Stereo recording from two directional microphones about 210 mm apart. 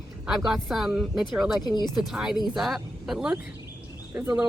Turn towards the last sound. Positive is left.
turn(degrees=-10)  # may be behind; listen again after turning